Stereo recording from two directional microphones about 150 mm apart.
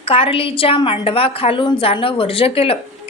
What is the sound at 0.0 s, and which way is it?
A woman's voice, 40° left (ahead or behind).